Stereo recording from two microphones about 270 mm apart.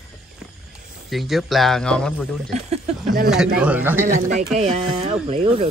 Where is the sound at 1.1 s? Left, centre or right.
Centre.